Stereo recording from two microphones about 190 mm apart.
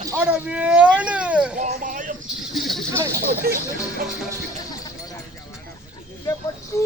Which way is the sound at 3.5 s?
55° right (ahead or behind).